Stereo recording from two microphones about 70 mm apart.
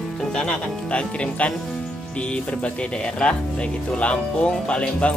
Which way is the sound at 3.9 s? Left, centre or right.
Centre.